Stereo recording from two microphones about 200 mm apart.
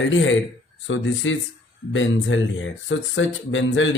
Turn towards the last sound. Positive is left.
turn(degrees=70)  # may be behind; listen again after turning